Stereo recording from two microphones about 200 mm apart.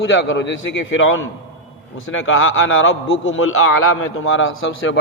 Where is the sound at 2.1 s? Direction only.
80° left.